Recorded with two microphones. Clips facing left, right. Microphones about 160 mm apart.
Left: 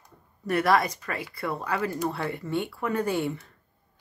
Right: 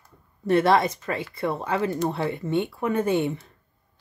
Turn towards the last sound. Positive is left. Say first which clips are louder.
# right 4 dB
turn(degrees=-20)  # may be behind; listen again after turning